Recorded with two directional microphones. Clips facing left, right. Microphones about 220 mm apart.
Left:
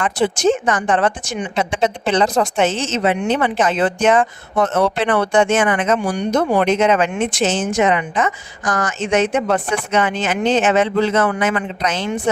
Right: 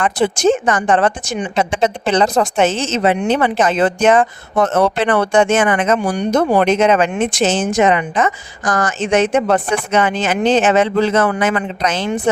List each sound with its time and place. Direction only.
0.0 s a woman's voice: 45° right (ahead or behind)